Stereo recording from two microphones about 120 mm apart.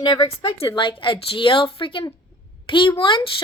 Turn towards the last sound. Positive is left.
turn(degrees=45)  # may be behind; listen again after turning